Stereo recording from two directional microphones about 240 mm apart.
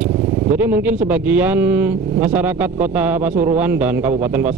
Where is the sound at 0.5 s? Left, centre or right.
Centre.